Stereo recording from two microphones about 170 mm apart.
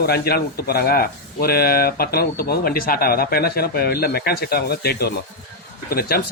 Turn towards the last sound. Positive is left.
turn(degrees=60)  # may be behind; listen again after turning